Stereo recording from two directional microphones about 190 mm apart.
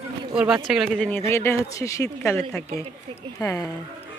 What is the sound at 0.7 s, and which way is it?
Speech, centre (ahead or behind).